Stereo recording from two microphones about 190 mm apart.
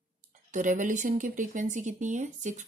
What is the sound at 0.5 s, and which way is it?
A woman's voice, 40° right (ahead or behind).